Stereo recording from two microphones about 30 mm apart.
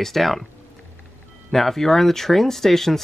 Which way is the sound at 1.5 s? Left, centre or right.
Centre.